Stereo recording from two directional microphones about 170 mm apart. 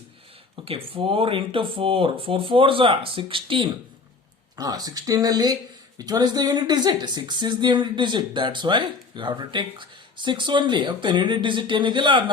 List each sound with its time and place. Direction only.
0.5 s speech: 35° right (ahead or behind)